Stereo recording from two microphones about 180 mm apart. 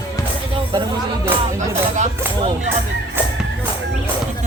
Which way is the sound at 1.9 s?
40° right (ahead or behind).